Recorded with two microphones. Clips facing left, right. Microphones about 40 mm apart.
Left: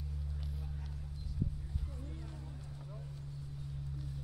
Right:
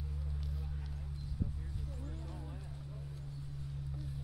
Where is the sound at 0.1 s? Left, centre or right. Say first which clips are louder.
Right 1 dB; centre.